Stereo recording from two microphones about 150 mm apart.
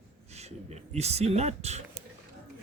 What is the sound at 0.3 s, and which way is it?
Speech, 45° right (ahead or behind).